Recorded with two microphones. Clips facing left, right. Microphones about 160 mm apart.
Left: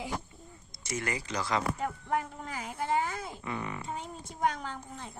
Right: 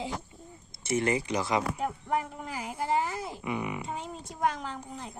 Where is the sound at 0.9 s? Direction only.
25° right (ahead or behind).